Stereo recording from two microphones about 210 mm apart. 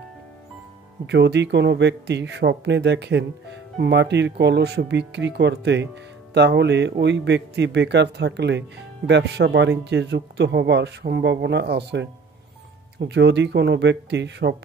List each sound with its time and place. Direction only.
1.0 s speech: 55° right (ahead or behind)